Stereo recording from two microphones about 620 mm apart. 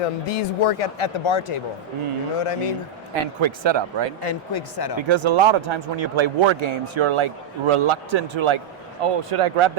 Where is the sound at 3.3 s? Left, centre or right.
Right.